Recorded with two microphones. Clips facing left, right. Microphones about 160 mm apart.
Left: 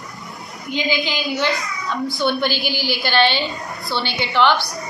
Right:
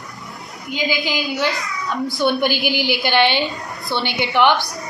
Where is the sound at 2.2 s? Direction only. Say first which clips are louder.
Right 3 dB; 15° right (ahead or behind).